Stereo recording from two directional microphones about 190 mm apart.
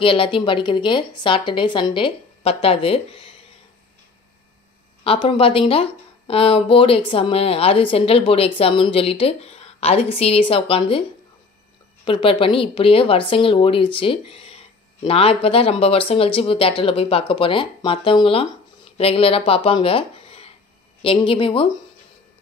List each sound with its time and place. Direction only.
0.0 s speech: 30° left (ahead or behind)
5.0 s speech: 30° left (ahead or behind)